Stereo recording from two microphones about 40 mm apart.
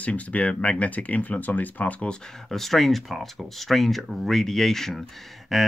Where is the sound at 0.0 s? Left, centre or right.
Left.